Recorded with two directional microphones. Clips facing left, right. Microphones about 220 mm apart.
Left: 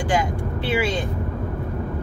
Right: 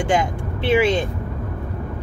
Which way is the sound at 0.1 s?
20° right (ahead or behind).